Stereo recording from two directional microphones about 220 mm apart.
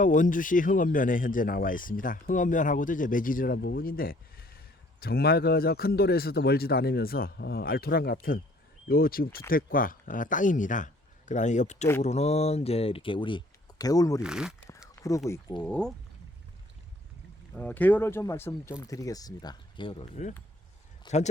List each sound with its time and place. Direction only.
0.0 s speech: 35° left (ahead or behind); by 14.2 s 15° left (ahead or behind)
14.2 s speech: 5° right (ahead or behind)
14.9 s a sound: 15° left (ahead or behind)
15.3 s speech: 20° left (ahead or behind)
15.6 s speech: 5° left (ahead or behind)
17.5 s speech: 5° left (ahead or behind); by 20.3 s 30° left (ahead or behind)